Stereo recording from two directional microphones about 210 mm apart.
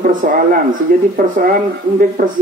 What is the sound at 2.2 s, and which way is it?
Speech, 45° right (ahead or behind).